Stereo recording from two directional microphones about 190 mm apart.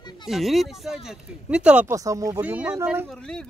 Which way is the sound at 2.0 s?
15° right (ahead or behind).